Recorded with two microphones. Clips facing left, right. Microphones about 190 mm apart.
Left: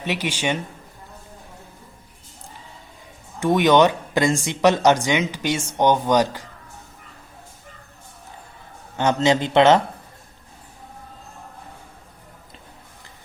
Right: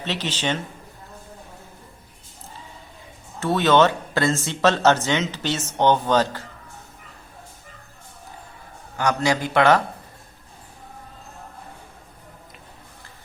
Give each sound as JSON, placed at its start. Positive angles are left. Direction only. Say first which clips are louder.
{"t": 0.0, "sound": "speech", "louder": "left 2 dB", "side_deg": 10}
{"t": 3.4, "sound": "speech", "louder": "left 2 dB", "side_deg": 15}
{"t": 9.0, "sound": "a man's voice", "louder": "left 3 dB", "side_deg": 25}